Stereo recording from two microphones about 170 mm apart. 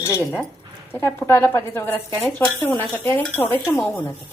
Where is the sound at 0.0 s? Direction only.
15° left (ahead or behind).